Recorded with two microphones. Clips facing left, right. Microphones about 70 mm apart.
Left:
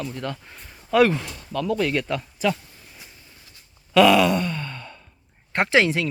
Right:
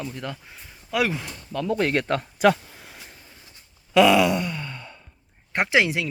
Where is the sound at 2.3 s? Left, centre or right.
Right.